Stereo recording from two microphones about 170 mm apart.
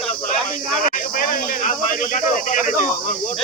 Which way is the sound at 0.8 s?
55° left (ahead or behind).